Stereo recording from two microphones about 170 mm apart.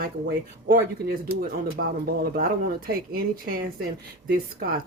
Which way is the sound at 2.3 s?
60° right (ahead or behind).